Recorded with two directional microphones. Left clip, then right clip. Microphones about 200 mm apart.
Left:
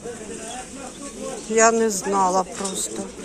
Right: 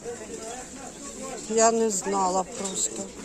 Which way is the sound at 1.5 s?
15° right (ahead or behind).